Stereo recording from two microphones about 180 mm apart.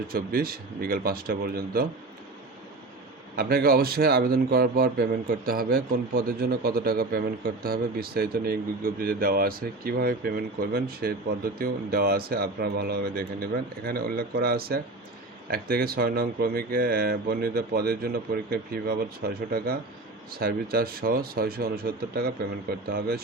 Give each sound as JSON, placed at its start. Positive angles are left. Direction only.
{"t": 0.1, "sound": "a man's voice", "side_deg": -55}
{"t": 3.3, "sound": "a man's voice", "side_deg": -55}